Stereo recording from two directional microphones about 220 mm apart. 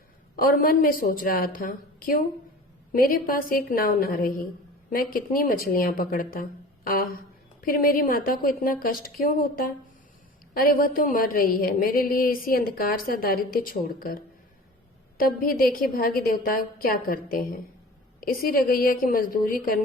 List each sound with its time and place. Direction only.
0.3 s a woman's voice: 40° left (ahead or behind)
15.2 s a woman's voice: 40° left (ahead or behind)